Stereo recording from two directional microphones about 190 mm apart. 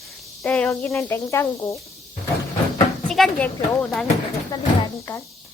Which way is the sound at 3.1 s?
5° left (ahead or behind).